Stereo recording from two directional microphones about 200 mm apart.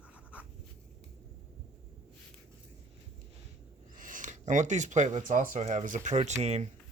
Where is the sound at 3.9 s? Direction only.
40° right (ahead or behind).